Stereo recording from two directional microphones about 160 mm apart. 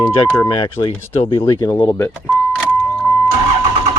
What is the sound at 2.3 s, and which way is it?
Vehicle, centre (ahead or behind).